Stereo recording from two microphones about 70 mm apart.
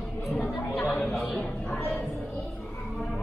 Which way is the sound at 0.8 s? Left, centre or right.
Centre.